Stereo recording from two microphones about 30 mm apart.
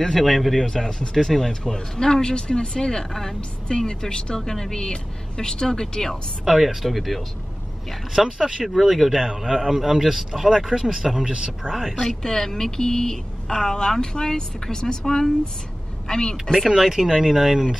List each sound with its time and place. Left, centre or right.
0.0 s speech: centre
0.6 s a woman's voice: centre
6.5 s speech: centre
8.4 s speech: right
8.6 s a man's voice: centre
11.1 s speech: right
11.9 s a woman's voice: centre
16.7 s a man's voice: centre